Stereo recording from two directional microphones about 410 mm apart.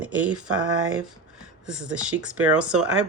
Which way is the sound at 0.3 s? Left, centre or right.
Right.